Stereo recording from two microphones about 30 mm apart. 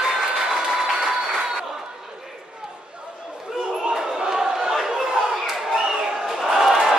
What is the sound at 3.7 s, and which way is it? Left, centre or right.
Battle cry, right.